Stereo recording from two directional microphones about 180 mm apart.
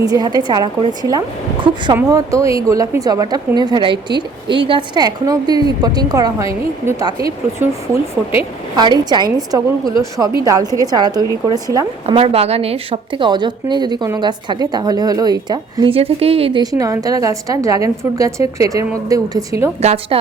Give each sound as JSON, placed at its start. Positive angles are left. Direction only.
{"t": 0.0, "sound": "a woman's voice", "side_deg": -20}
{"t": 8.7, "sound": "a woman's voice", "side_deg": -25}
{"t": 12.0, "sound": "a woman's voice", "side_deg": -30}
{"t": 19.8, "sound": "a woman's voice", "side_deg": -35}